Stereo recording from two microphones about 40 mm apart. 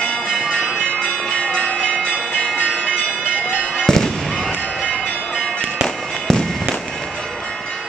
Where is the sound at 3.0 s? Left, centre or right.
Left.